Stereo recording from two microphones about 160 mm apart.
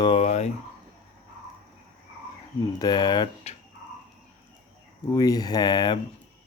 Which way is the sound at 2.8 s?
25° left (ahead or behind).